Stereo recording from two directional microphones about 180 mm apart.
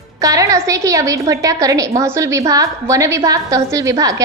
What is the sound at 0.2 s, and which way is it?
A woman's voice, 20° right (ahead or behind).